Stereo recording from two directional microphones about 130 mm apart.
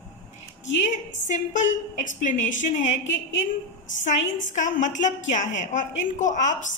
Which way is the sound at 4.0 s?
70° left (ahead or behind).